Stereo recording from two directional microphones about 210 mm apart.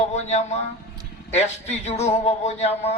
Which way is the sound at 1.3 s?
30° left (ahead or behind).